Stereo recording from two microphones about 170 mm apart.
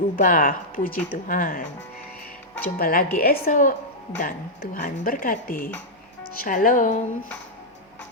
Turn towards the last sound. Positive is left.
turn(degrees=50)  # may be behind; listen again after turning